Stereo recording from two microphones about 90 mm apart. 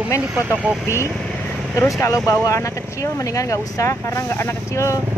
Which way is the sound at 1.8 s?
30° left (ahead or behind).